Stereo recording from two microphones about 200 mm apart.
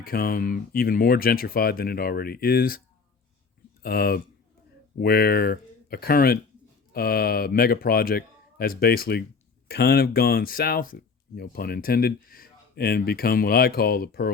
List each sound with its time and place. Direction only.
0.0 s speech: 50° left (ahead or behind)
3.8 s speech: 50° left (ahead or behind)